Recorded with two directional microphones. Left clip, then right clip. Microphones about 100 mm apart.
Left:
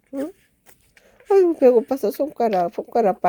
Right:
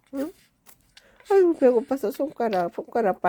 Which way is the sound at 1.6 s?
30° left (ahead or behind).